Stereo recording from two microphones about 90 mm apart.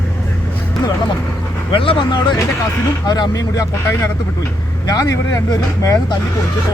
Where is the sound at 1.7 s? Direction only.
80° left.